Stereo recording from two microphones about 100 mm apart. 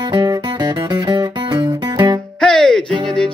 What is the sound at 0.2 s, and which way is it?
Music, 40° right (ahead or behind).